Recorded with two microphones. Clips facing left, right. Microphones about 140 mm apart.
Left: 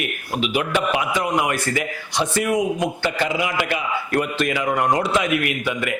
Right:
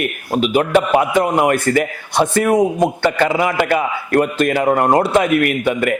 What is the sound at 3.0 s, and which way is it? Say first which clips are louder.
A man's voice: right 6 dB; 55° right (ahead or behind).